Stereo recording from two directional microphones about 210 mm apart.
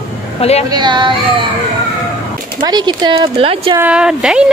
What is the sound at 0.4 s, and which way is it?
Speech, 30° left (ahead or behind).